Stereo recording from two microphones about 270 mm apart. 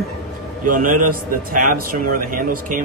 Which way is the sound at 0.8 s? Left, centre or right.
Right.